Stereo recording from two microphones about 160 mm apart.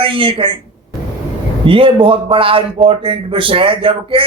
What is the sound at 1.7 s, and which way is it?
A woman's voice, 35° right (ahead or behind).